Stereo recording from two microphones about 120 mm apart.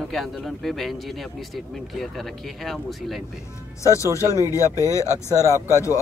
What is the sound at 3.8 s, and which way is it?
Speech, 25° left (ahead or behind).